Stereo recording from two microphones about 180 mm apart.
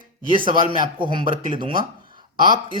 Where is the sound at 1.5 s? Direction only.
25° right (ahead or behind).